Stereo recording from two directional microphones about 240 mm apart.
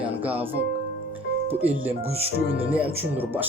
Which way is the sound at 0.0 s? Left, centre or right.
Centre.